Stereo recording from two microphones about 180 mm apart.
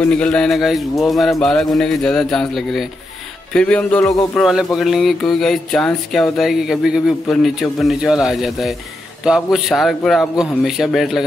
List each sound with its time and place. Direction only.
0.1 s speech: 5° left (ahead or behind)
3.5 s music: 5° left (ahead or behind)
4.0 s speech: 20° left (ahead or behind)
4.4 s speech: centre (ahead or behind)